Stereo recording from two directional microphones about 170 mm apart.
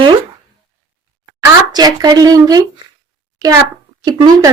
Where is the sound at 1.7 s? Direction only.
25° right (ahead or behind).